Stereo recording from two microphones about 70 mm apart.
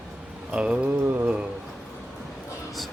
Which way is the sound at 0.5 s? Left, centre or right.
Centre.